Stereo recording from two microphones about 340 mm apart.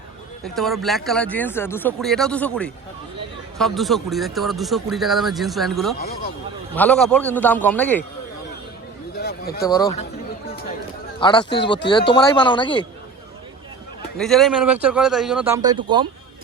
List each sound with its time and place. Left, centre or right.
0.4 s speech: centre
9.1 s a sound: left
9.6 s speech: centre
11.2 s speech: centre
14.2 s speech: centre